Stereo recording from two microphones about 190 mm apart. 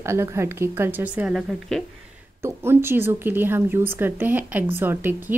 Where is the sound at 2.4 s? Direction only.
15° right (ahead or behind).